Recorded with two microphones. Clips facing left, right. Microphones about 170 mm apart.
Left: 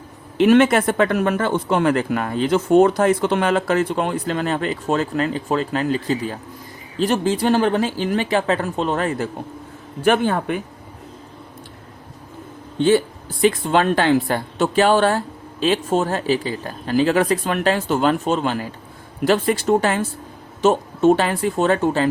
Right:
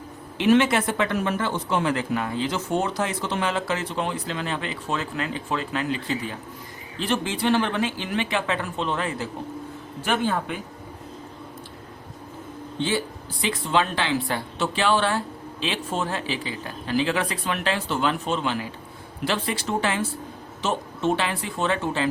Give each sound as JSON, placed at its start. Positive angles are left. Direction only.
{"t": 0.5, "sound": "a man's voice", "side_deg": 50}
{"t": 13.4, "sound": "speech", "side_deg": 50}